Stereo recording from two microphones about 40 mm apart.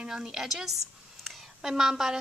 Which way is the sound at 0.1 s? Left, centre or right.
Centre.